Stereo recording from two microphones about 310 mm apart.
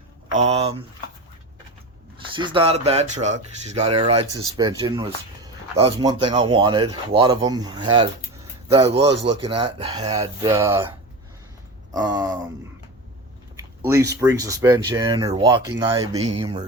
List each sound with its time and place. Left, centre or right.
0.3 s speech: right
2.3 s speech: centre
11.9 s speech: centre
13.6 s a sound: centre
14.2 s speech: centre